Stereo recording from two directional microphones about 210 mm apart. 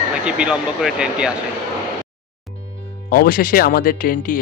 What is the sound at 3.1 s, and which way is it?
Speech, 45° left (ahead or behind).